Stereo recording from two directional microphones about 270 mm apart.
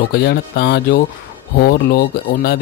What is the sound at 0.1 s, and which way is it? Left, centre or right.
Speech, left.